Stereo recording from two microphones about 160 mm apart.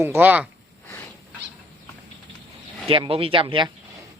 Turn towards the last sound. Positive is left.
turn(degrees=-30)  # may be behind; listen again after turning